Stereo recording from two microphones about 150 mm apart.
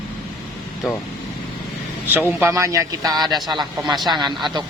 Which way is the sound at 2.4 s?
20° right (ahead or behind).